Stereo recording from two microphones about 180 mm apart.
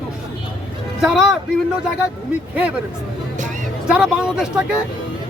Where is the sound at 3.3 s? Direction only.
45° right (ahead or behind).